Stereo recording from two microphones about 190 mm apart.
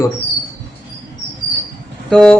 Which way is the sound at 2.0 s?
5° left (ahead or behind).